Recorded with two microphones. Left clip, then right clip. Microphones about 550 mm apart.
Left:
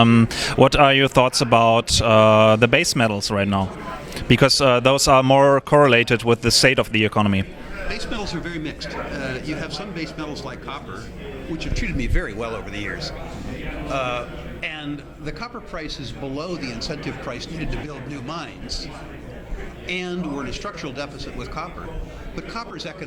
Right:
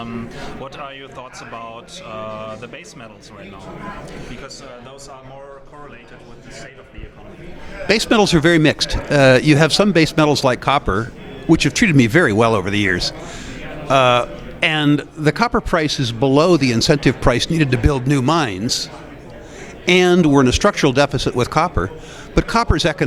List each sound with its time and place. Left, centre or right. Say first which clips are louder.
0.0 s speech: left 12 dB; left
7.9 s a man's voice: right 15 dB; right
19.8 s a man's voice: right 15 dB; right